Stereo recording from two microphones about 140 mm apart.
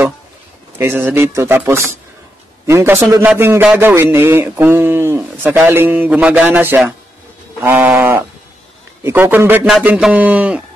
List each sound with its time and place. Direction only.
0.7 s a man's voice: 15° right (ahead or behind)